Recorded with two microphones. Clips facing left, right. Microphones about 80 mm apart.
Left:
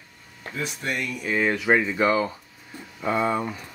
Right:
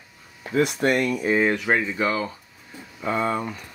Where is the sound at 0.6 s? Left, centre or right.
Right.